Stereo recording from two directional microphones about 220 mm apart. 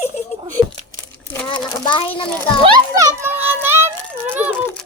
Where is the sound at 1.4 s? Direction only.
20° left (ahead or behind).